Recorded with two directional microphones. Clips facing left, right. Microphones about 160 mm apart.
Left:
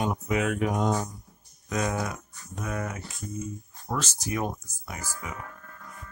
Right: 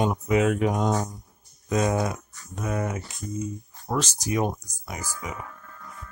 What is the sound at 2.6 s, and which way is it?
Speech, 25° right (ahead or behind).